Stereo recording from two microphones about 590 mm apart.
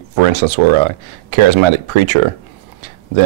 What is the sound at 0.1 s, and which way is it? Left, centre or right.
Speech, right.